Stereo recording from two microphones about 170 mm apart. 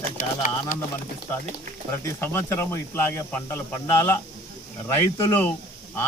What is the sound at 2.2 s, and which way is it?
Speech, 15° left (ahead or behind).